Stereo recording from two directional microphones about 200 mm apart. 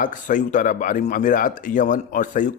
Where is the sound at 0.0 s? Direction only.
40° left (ahead or behind).